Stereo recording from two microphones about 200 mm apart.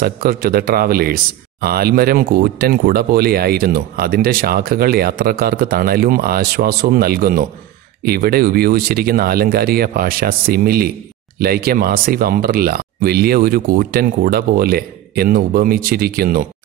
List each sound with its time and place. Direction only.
0.0 s speech: 45° right (ahead or behind)